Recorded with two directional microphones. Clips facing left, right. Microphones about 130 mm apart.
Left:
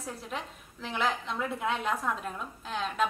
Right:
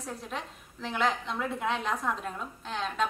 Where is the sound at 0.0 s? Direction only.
5° left (ahead or behind).